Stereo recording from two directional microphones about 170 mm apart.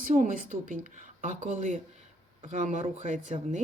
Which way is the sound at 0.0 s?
50° right (ahead or behind).